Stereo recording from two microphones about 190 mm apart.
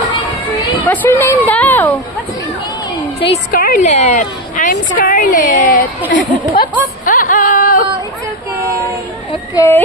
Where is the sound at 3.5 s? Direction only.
45° left (ahead or behind).